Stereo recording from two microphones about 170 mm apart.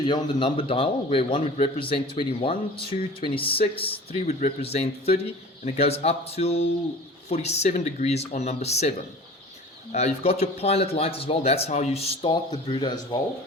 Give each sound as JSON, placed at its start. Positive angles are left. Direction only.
{"t": 0.1, "sound": "a man's voice", "side_deg": 30}
{"t": 9.9, "sound": "a man's voice", "side_deg": 40}